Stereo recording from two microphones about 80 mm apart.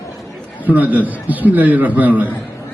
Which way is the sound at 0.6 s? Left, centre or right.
Centre.